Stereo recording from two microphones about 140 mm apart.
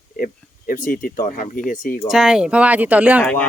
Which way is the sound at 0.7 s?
90° left.